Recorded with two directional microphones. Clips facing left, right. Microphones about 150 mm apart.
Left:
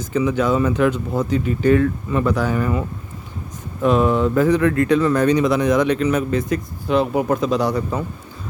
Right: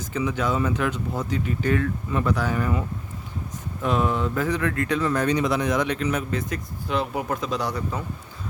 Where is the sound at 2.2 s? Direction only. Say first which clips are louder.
Left 5 dB; 35° left (ahead or behind).